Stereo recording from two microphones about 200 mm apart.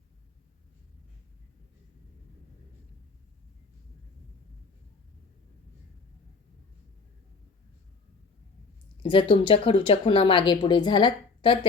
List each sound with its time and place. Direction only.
9.0 s speech: 25° left (ahead or behind)